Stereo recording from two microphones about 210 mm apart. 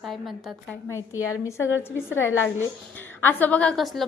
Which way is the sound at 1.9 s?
10° left (ahead or behind).